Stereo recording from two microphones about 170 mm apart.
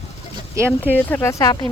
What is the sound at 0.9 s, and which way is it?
Speech, 10° left (ahead or behind).